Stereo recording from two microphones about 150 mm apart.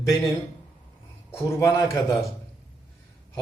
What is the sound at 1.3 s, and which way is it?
Speech, 20° left (ahead or behind).